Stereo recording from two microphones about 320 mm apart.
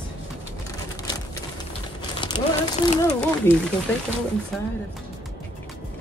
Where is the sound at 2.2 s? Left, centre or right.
Centre.